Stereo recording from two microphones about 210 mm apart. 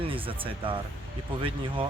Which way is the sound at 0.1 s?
25° right (ahead or behind).